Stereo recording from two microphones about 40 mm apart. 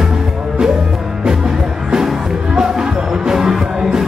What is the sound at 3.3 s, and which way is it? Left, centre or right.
Music, centre.